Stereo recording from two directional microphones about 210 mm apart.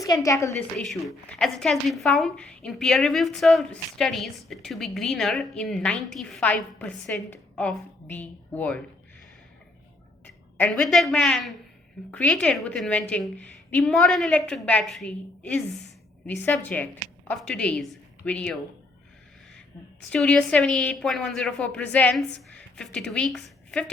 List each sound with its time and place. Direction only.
0.0 s a woman's voice: 15° left (ahead or behind)
0.8 s speech: centre (ahead or behind)
10.6 s a woman's voice: 5° left (ahead or behind)
20.1 s speech: 5° left (ahead or behind)